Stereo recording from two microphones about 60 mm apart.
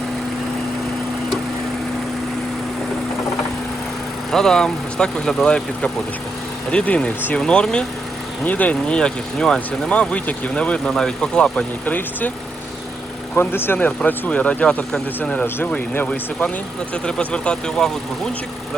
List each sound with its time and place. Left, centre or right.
4.3 s speech: centre
8.4 s speech: left
13.3 s speech: left
16.9 s speech: centre